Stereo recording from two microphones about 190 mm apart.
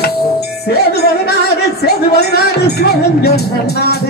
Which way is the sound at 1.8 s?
55° left (ahead or behind).